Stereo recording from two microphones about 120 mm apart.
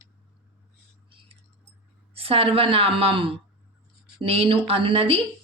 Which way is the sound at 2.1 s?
55° right (ahead or behind).